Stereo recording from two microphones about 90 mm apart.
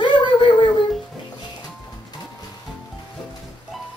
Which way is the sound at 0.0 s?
60° left (ahead or behind).